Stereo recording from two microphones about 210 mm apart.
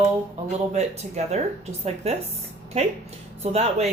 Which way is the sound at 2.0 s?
30° right (ahead or behind).